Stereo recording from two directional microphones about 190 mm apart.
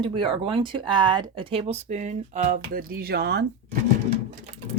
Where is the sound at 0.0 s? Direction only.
25° right (ahead or behind); by 3.4 s 60° right (ahead or behind).